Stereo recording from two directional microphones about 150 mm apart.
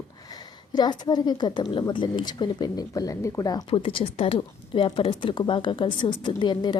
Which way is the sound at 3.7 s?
40° left (ahead or behind).